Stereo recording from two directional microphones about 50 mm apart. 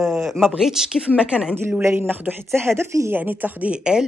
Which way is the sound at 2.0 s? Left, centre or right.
Right.